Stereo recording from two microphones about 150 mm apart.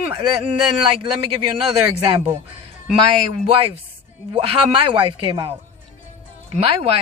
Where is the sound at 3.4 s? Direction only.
40° right (ahead or behind).